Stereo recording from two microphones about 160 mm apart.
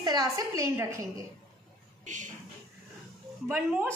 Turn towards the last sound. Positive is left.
turn(degrees=-10)  # may be behind; listen again after turning